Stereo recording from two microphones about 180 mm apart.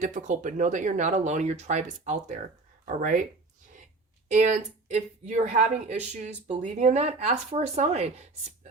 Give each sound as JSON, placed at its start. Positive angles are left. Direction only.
{"t": 0.0, "sound": "speech", "side_deg": -45}
{"t": 4.3, "sound": "speech", "side_deg": -40}